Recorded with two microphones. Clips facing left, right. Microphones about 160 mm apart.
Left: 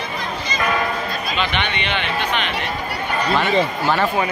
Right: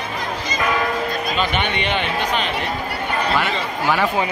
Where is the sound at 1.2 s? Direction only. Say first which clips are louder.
Even; 45° right (ahead or behind).